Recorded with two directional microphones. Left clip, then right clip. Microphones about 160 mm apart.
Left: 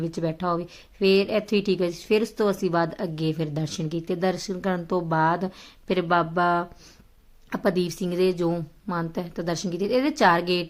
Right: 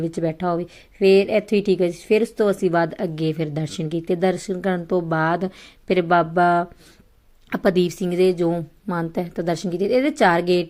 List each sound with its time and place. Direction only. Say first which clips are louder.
0.0 s a woman's voice: right 4 dB; 15° right (ahead or behind)